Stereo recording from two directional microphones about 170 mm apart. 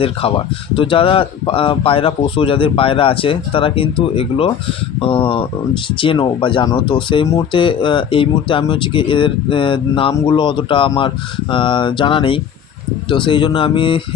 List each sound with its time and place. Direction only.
0.0 s speech: 35° left (ahead or behind)